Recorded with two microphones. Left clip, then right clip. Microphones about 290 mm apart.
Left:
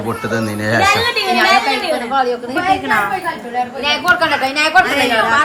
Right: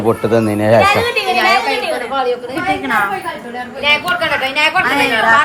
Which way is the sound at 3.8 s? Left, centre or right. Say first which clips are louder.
Right 1 dB; left.